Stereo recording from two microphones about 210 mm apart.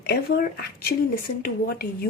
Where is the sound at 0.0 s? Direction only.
50° left (ahead or behind).